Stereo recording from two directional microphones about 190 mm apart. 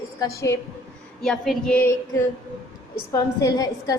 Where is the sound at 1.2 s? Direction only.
Centre (ahead or behind).